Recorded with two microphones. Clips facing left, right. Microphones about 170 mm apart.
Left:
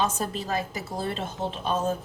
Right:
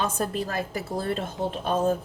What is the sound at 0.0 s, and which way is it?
A woman's voice, 55° right (ahead or behind).